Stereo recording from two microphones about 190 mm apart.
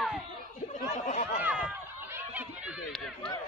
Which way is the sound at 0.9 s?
35° left (ahead or behind).